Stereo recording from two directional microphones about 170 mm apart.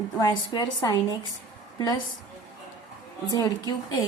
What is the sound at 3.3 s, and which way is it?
Speech, 25° left (ahead or behind).